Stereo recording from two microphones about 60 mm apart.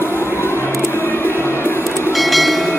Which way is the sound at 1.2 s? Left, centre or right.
Left.